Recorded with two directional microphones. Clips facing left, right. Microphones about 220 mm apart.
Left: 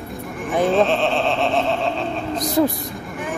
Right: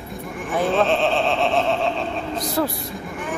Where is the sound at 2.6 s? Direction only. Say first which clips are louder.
Left 5 dB; 20° left (ahead or behind).